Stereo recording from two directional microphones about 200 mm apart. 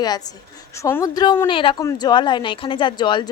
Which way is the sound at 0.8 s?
15° left (ahead or behind).